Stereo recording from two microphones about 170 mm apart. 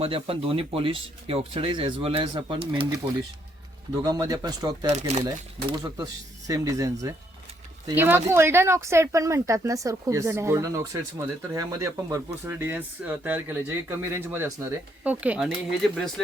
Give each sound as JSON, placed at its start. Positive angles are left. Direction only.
{"t": 0.0, "sound": "speech", "side_deg": -35}
{"t": 4.0, "sound": "speech", "side_deg": -20}
{"t": 4.9, "sound": "speech", "side_deg": -45}
{"t": 5.7, "sound": "speech", "side_deg": -25}